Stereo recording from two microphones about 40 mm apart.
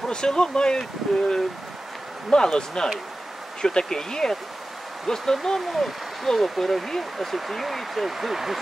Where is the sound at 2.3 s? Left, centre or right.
Centre.